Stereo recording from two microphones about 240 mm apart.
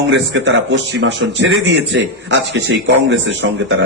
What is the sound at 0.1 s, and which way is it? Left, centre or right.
A man's voice, right.